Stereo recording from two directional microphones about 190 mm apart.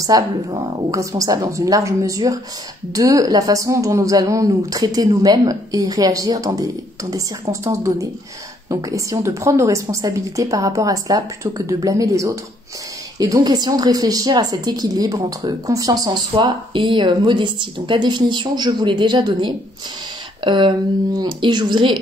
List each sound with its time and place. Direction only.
0.0 s a woman's voice: 20° right (ahead or behind)